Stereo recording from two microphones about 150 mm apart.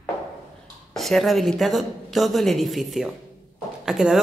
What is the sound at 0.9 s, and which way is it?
Speech, centre (ahead or behind).